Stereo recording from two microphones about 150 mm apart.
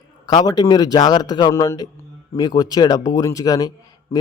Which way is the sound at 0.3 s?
30° left (ahead or behind).